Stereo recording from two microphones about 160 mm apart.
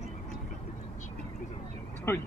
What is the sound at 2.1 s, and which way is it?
Speech, 15° left (ahead or behind).